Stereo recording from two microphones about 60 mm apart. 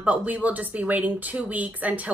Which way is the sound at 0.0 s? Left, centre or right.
Right.